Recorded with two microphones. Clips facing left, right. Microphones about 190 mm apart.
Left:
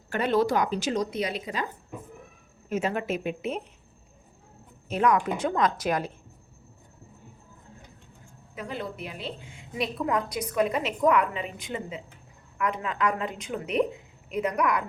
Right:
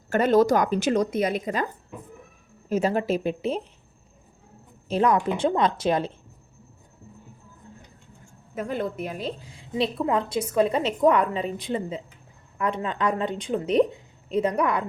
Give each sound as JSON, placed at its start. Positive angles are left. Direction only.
{"t": 0.1, "sound": "speech", "side_deg": -45}
{"t": 2.6, "sound": "a woman's voice", "side_deg": -35}
{"t": 4.9, "sound": "speech", "side_deg": -30}
{"t": 8.5, "sound": "a woman's voice", "side_deg": -50}